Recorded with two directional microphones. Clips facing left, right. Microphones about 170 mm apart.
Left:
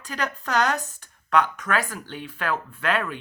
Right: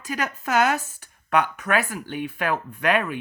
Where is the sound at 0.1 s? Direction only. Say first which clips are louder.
Right 2 dB; 10° right (ahead or behind).